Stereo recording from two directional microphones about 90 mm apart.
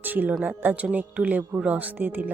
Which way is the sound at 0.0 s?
20° right (ahead or behind).